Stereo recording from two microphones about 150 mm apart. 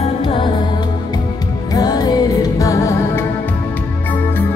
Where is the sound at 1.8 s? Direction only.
25° left (ahead or behind).